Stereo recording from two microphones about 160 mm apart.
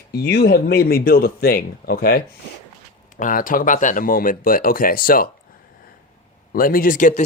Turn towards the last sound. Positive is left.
turn(degrees=55)  # may be behind; listen again after turning